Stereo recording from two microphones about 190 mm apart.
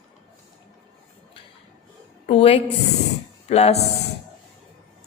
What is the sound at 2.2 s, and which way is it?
A woman's voice, 30° left (ahead or behind).